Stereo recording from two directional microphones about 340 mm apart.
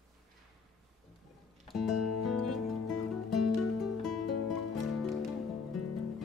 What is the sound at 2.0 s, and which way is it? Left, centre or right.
Music, left.